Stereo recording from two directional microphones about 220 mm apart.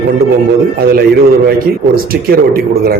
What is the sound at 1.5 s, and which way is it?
A man's voice, 45° right (ahead or behind).